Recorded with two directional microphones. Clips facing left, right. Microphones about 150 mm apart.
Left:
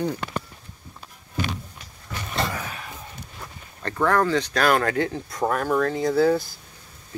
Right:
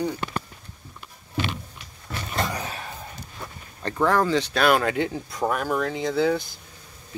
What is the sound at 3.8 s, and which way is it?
Speech, 15° right (ahead or behind).